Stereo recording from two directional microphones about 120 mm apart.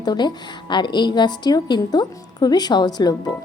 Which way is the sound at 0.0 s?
35° left (ahead or behind).